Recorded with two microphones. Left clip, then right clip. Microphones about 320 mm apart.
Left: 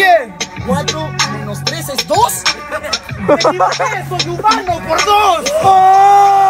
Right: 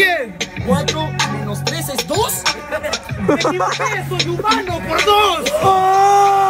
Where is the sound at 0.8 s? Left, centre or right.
Left.